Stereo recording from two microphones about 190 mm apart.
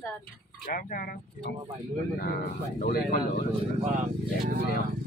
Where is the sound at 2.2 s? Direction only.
50° left (ahead or behind).